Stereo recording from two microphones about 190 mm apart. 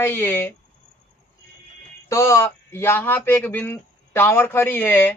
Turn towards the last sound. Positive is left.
turn(degrees=10)  # may be behind; listen again after turning